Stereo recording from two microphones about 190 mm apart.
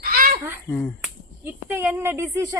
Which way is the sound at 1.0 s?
10° right (ahead or behind).